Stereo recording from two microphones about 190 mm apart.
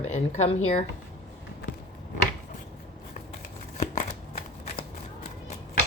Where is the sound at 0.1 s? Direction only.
35° left (ahead or behind).